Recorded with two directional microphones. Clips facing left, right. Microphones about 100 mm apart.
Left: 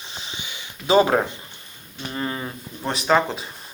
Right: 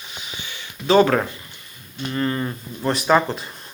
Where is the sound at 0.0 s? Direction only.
30° left (ahead or behind).